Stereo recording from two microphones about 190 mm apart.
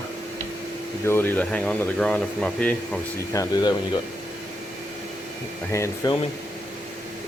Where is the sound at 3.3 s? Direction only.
20° left (ahead or behind).